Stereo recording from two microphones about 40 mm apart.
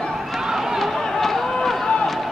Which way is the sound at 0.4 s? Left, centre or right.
Centre.